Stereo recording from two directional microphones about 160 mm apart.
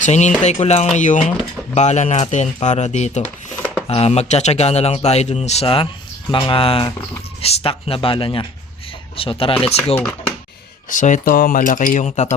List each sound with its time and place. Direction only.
0.0 s speech: 45° left (ahead or behind)
10.8 s speech: 50° left (ahead or behind)